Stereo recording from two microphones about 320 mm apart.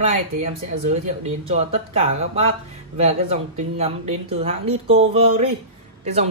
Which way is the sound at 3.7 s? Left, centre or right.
Centre.